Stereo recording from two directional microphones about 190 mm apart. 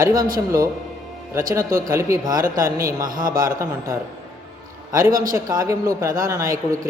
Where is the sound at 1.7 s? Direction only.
15° right (ahead or behind).